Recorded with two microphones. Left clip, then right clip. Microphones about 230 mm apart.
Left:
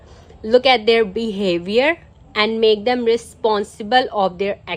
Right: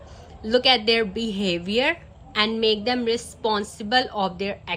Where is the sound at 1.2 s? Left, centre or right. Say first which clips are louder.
Left 6 dB; centre.